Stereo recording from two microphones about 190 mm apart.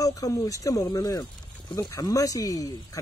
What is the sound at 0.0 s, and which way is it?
Speech, 15° left (ahead or behind).